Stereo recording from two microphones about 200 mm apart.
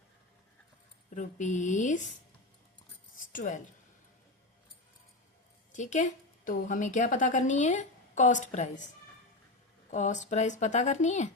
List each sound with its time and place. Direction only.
1.1 s a woman's voice: 40° left (ahead or behind)
3.3 s a woman's voice: 40° left (ahead or behind)
5.7 s a woman's voice: 35° left (ahead or behind)
9.9 s a woman's voice: 35° left (ahead or behind)